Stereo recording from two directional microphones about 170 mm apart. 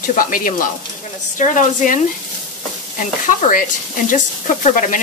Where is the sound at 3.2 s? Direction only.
50° left (ahead or behind).